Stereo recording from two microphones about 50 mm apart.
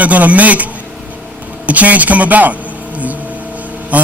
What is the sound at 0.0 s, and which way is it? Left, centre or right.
A man's voice, right.